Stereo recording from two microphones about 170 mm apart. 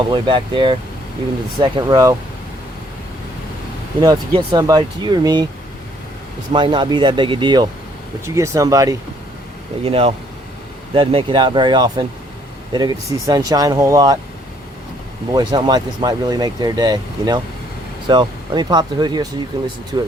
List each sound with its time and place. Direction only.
0.1 s speech: 30° right (ahead or behind)
4.0 s speech: 25° right (ahead or behind)
6.5 s speech: 30° right (ahead or behind)
9.8 s speech: 35° right (ahead or behind)
15.3 s speech: 25° right (ahead or behind)